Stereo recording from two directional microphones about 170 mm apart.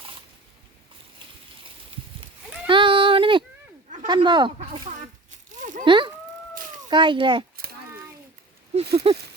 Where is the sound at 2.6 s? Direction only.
30° right (ahead or behind).